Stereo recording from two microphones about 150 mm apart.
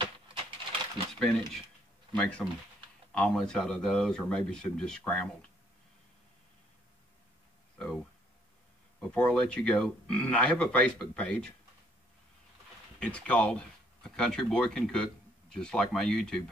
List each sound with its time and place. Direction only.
0.0 s a sound: 35° right (ahead or behind)
2.1 s speech: 10° left (ahead or behind)
9.0 s speech: 5° left (ahead or behind)
13.0 s speech: 10° left (ahead or behind)